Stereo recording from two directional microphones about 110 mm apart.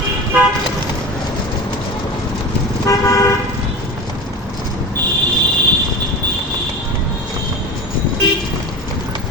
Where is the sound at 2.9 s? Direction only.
30° left (ahead or behind).